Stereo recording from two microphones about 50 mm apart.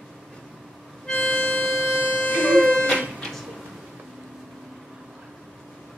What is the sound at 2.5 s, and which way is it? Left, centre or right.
Music, centre.